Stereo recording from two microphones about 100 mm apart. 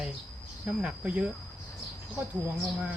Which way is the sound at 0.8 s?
10° right (ahead or behind).